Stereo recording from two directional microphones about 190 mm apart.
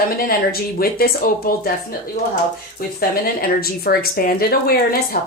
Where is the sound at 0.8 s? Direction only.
50° left (ahead or behind).